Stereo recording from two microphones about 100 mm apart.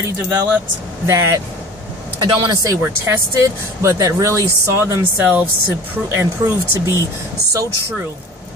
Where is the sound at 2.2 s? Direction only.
40° right (ahead or behind).